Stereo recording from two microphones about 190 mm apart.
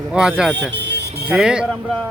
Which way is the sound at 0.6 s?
65° right (ahead or behind).